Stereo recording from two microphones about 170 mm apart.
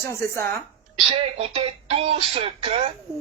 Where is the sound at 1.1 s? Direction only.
35° right (ahead or behind).